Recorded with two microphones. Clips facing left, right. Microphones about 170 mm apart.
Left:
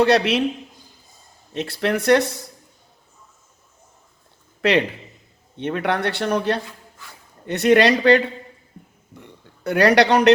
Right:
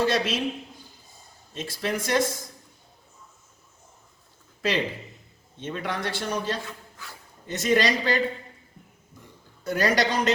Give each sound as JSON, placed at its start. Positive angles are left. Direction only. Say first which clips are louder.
{"t": 0.0, "sound": "a man's voice", "louder": "left 8 dB", "side_deg": 65}
{"t": 1.5, "sound": "a man's voice", "louder": "left 7 dB", "side_deg": 65}
{"t": 4.6, "sound": "a man's voice", "louder": "left 7 dB", "side_deg": 65}
{"t": 9.1, "sound": "a sound", "louder": "left 7 dB", "side_deg": 65}